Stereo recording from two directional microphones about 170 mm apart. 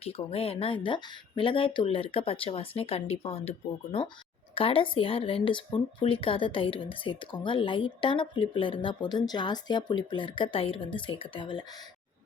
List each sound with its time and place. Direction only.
0.0 s speech: 35° left (ahead or behind)
4.5 s speech: 30° left (ahead or behind)